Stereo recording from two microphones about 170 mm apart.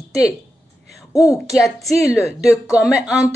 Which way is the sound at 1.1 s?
20° left (ahead or behind).